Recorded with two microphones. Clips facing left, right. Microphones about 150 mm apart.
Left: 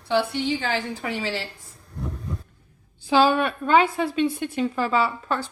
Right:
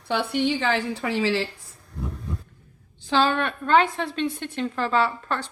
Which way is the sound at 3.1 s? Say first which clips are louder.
Left 3 dB; 10° left (ahead or behind).